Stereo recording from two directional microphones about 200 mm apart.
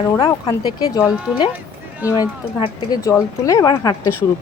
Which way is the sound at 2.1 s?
20° left (ahead or behind).